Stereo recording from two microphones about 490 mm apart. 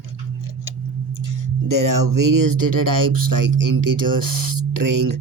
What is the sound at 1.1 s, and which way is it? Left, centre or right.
Speech, right.